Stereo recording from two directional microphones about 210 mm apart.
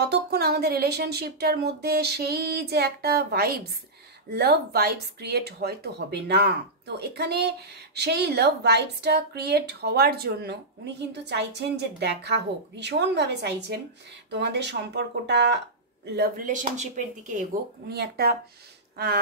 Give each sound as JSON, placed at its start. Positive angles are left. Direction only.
{"t": 0.1, "sound": "speech", "side_deg": -50}